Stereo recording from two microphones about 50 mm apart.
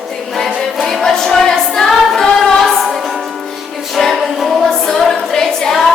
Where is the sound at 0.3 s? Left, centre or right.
Centre.